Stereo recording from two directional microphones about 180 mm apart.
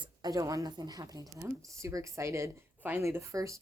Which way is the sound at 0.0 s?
20° right (ahead or behind).